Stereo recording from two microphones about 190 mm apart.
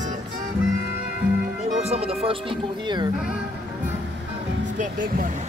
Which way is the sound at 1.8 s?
30° right (ahead or behind).